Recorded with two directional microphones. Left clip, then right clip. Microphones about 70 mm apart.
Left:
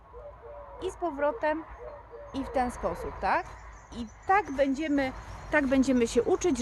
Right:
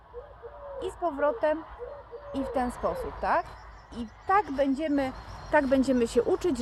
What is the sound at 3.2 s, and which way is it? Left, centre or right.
A woman's voice, left.